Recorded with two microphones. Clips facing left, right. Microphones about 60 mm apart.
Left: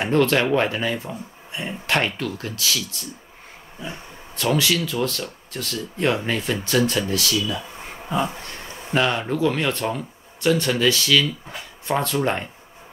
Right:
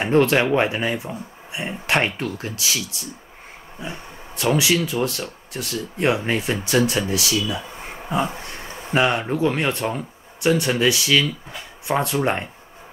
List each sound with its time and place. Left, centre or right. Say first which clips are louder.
0.1 s speech: right 2 dB; centre
4.4 s speech: right 2 dB; centre